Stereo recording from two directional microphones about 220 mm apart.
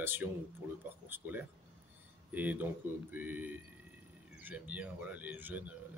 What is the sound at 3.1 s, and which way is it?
A man's voice, 10° right (ahead or behind).